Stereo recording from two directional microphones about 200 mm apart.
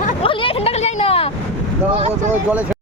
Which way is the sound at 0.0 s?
40° left (ahead or behind).